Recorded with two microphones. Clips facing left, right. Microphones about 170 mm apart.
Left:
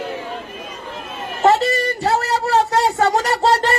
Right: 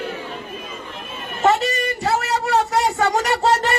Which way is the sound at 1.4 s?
35° left (ahead or behind).